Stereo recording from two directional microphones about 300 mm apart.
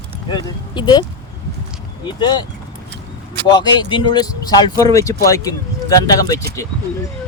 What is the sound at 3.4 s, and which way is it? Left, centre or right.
Speech, centre.